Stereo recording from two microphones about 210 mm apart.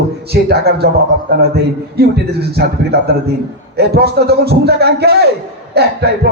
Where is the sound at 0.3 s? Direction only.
50° right (ahead or behind).